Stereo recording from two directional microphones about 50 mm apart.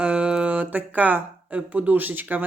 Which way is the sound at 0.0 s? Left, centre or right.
Centre.